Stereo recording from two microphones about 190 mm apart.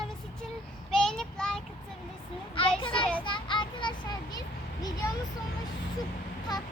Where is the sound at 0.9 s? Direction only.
Centre (ahead or behind).